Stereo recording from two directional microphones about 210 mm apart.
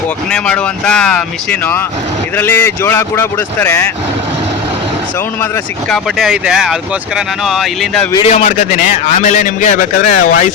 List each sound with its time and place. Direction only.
0.3 s speech: 5° left (ahead or behind)
5.9 s speech: centre (ahead or behind)
8.1 s a man's voice: 30° left (ahead or behind)